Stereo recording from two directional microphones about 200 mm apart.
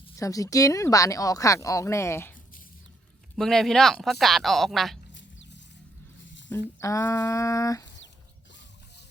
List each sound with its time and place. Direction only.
0.2 s speech: 15° left (ahead or behind); by 4.9 s centre (ahead or behind)
5.1 s a sound: 65° left (ahead or behind)
6.7 s speech: 15° left (ahead or behind)